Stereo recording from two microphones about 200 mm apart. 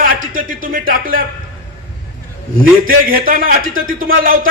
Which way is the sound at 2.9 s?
45° right (ahead or behind).